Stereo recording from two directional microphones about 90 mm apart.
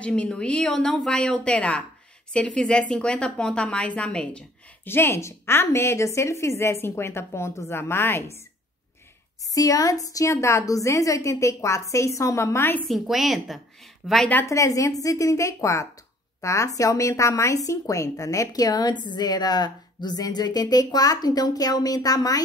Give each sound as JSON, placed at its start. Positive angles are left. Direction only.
{"t": 0.0, "sound": "a woman's voice", "side_deg": 10}
{"t": 4.8, "sound": "a woman's voice", "side_deg": 25}
{"t": 9.5, "sound": "a woman's voice", "side_deg": 40}
{"t": 12.8, "sound": "a woman's voice", "side_deg": 0}
{"t": 14.4, "sound": "a woman's voice", "side_deg": 35}